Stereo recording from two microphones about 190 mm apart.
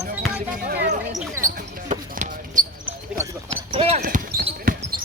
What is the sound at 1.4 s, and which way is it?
Basketball bounce, 45° right (ahead or behind).